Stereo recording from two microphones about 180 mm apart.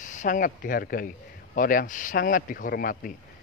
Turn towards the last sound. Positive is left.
turn(degrees=50)  # may be behind; listen again after turning